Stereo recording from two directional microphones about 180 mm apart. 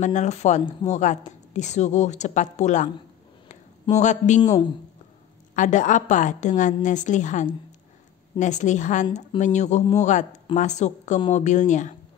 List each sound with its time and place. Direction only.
0.0 s a woman's voice: 40° left (ahead or behind)
3.9 s a woman's voice: 40° left (ahead or behind)
5.6 s a woman's voice: 45° left (ahead or behind)